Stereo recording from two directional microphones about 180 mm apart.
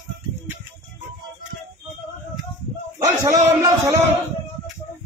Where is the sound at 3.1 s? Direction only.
15° right (ahead or behind).